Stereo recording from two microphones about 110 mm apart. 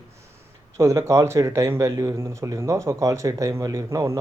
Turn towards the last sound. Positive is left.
turn(degrees=-30)  # may be behind; listen again after turning